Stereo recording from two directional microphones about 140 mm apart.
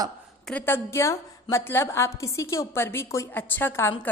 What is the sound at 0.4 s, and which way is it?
A woman's voice, 10° left (ahead or behind).